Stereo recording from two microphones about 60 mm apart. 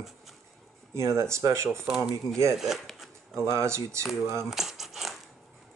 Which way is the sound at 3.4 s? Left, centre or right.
Right.